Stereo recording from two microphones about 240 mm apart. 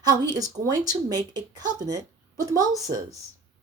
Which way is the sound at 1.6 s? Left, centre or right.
Centre.